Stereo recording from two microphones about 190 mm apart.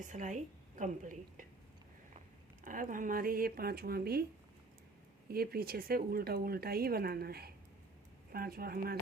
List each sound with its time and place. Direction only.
0.0 s a woman's voice: 40° right (ahead or behind)
2.6 s speech: 45° right (ahead or behind)
5.3 s speech: 50° right (ahead or behind)